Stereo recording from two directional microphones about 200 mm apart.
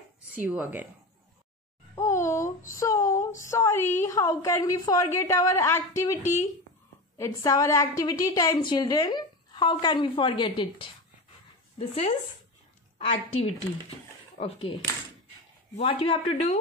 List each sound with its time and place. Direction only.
0.3 s speech: 10° right (ahead or behind)
2.0 s a sound: 15° left (ahead or behind)
4.0 s a woman's voice: 15° left (ahead or behind)
7.2 s a woman's voice: 15° left (ahead or behind)
11.9 s a woman's voice: 25° left (ahead or behind)
15.8 s a woman's voice: 25° left (ahead or behind)